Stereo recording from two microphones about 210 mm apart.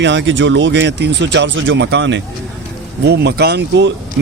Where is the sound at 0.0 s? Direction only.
60° right (ahead or behind).